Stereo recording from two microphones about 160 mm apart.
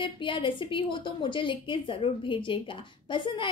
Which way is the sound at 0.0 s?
30° left (ahead or behind).